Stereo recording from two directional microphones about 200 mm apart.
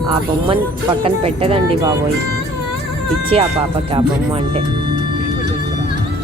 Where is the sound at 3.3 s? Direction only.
30° right (ahead or behind).